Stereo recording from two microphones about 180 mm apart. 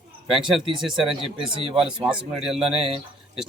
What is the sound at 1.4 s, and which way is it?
Speech, 30° right (ahead or behind).